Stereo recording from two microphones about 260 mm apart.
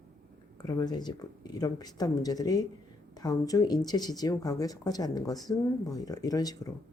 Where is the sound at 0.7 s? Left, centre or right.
Centre.